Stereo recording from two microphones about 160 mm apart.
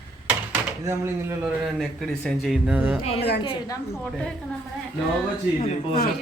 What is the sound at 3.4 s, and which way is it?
Speech, 20° left (ahead or behind).